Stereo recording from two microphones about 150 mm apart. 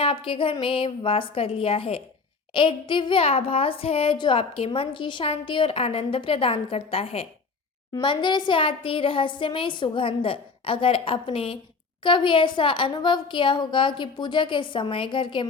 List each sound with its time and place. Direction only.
0.0 s a woman's voice: 35° left (ahead or behind)